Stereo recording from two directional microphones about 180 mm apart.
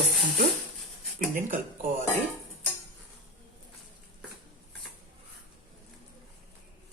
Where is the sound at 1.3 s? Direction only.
50° right (ahead or behind).